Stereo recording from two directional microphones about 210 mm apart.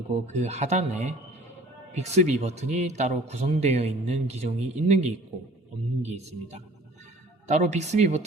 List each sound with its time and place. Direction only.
0.3 s speech: 35° right (ahead or behind)